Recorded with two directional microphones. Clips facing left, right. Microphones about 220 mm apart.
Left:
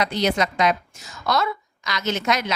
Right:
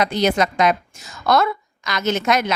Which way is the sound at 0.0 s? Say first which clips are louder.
Right 3 dB; 50° right (ahead or behind).